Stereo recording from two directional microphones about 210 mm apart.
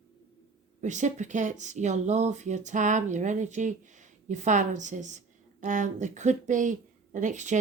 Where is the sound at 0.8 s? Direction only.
35° right (ahead or behind).